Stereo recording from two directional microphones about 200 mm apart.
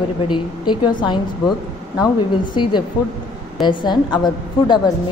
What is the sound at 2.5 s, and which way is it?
A woman's voice, 25° left (ahead or behind).